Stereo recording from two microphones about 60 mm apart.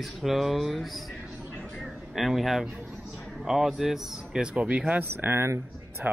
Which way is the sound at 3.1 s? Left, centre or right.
Centre.